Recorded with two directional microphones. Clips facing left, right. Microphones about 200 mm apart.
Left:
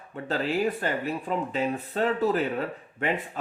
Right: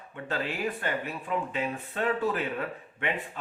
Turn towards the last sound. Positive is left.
turn(degrees=40)  # may be behind; listen again after turning